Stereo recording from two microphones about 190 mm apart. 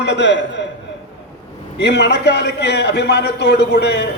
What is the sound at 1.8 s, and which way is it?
A man's voice, 65° left (ahead or behind).